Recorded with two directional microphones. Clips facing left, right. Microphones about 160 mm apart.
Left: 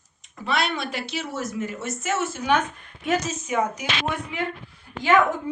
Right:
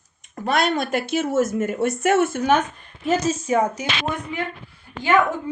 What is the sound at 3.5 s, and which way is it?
Speech, 35° right (ahead or behind).